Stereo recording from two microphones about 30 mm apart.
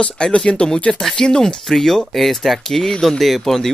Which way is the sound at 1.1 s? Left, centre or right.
Left.